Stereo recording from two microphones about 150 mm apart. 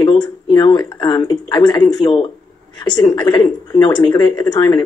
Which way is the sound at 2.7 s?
30° left (ahead or behind).